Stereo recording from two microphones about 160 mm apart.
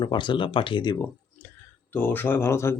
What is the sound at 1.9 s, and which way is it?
Speech, 15° left (ahead or behind).